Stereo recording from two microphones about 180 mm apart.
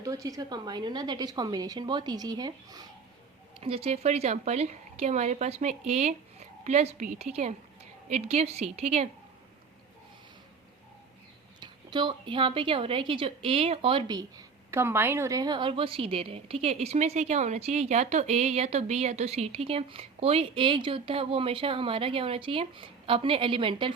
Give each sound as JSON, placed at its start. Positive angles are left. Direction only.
{"t": 0.0, "sound": "a woman's voice", "side_deg": -20}
{"t": 3.6, "sound": "a woman's voice", "side_deg": -30}
{"t": 11.6, "sound": "a woman's voice", "side_deg": -25}